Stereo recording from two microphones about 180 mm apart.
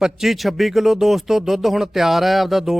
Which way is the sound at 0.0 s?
Centre (ahead or behind).